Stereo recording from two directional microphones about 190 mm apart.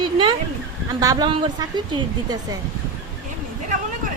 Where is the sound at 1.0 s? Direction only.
20° right (ahead or behind).